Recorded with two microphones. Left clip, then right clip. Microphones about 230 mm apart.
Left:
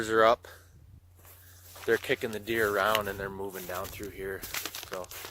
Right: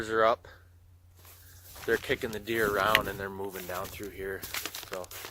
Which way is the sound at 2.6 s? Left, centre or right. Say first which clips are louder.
Right 1 dB; centre.